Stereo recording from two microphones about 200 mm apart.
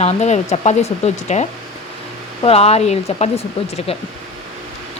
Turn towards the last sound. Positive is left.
turn(degrees=30)  # may be behind; listen again after turning